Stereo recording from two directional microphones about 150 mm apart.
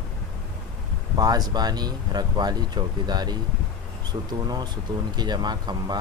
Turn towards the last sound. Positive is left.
turn(degrees=-30)  # may be behind; listen again after turning